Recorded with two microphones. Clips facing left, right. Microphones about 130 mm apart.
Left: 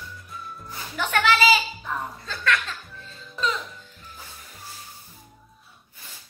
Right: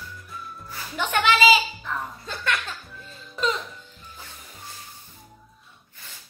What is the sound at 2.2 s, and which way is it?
Music, 25° right (ahead or behind).